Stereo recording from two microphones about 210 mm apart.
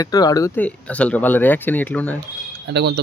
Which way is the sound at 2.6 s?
50° right (ahead or behind).